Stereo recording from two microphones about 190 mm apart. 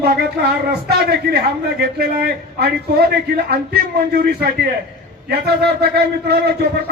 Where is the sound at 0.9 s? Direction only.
55° right (ahead or behind).